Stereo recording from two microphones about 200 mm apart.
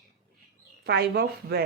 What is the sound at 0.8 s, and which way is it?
Speech, 55° right (ahead or behind).